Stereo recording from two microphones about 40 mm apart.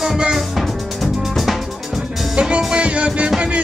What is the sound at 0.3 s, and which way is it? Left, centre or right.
Music, centre.